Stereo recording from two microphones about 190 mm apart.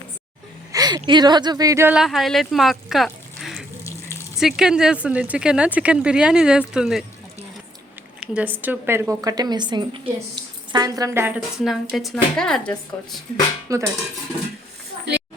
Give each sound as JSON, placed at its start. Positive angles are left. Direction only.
{"t": 0.7, "sound": "speech", "side_deg": -20}
{"t": 2.0, "sound": "speech", "side_deg": 0}
{"t": 8.2, "sound": "speech", "side_deg": -5}
{"t": 13.7, "sound": "speech", "side_deg": -15}